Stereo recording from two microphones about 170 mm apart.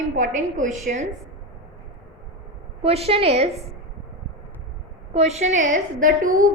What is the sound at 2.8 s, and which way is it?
Speech, 35° right (ahead or behind).